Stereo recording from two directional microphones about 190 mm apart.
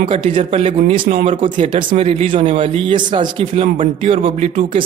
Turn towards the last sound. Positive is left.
turn(degrees=-30)  # may be behind; listen again after turning